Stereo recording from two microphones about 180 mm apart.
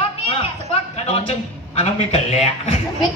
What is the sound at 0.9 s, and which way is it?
A man's voice, 35° left (ahead or behind).